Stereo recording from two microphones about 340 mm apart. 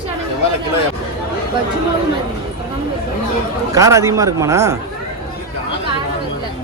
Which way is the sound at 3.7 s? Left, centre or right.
Centre.